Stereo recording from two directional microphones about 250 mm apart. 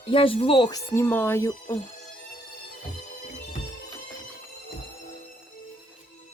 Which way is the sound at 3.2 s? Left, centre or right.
Left.